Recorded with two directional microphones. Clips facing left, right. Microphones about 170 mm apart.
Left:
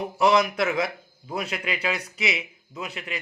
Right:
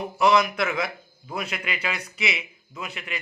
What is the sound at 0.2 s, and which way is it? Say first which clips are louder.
A man's voice: even; 35° left (ahead or behind).